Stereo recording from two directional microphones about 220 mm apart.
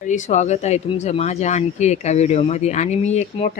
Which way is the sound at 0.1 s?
35° left (ahead or behind).